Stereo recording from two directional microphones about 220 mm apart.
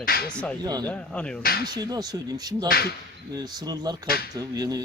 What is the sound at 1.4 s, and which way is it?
Speech, 45° left (ahead or behind).